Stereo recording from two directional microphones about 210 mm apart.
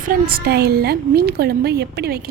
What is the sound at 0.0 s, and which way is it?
A woman's voice, 45° right (ahead or behind).